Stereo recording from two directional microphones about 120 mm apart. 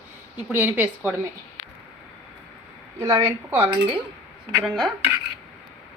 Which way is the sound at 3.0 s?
25° right (ahead or behind).